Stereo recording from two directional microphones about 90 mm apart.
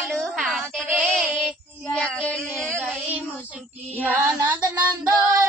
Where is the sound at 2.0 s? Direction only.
15° left (ahead or behind).